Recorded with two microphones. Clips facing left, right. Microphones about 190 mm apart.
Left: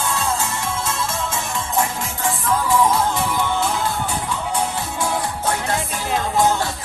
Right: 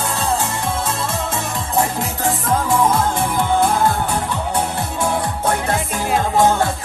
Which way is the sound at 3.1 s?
50° right (ahead or behind).